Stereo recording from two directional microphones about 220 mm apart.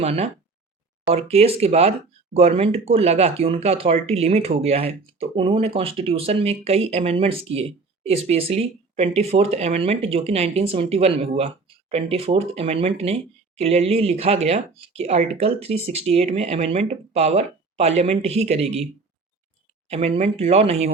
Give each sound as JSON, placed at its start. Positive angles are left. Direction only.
{"t": 0.0, "sound": "speech", "side_deg": -25}
{"t": 19.9, "sound": "speech", "side_deg": -30}